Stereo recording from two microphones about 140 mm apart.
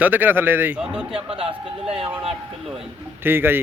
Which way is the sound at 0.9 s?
40° right (ahead or behind).